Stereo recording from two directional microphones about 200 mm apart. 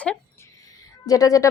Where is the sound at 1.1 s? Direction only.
15° left (ahead or behind).